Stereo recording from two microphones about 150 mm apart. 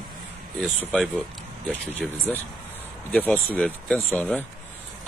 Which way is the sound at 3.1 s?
10° left (ahead or behind).